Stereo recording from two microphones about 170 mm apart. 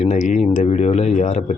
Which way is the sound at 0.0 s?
45° left (ahead or behind).